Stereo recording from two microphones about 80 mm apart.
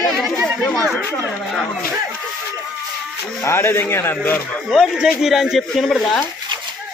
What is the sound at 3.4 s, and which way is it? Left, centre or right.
Speech, left.